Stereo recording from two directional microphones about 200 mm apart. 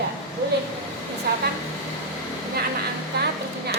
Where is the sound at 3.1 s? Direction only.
55° right (ahead or behind).